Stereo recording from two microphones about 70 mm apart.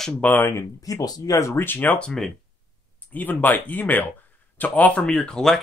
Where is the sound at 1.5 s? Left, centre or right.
Left.